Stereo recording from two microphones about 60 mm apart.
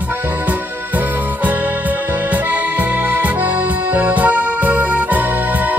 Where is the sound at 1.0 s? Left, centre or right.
Right.